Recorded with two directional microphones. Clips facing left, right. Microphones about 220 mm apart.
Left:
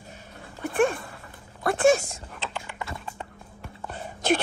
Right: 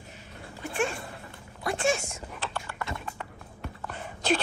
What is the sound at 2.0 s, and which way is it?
Speech, 35° left (ahead or behind).